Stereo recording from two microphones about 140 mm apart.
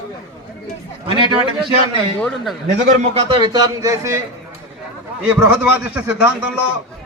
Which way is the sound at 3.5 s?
25° right (ahead or behind).